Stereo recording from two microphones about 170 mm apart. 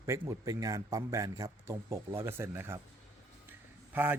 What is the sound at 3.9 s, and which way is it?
Speech, 10° right (ahead or behind).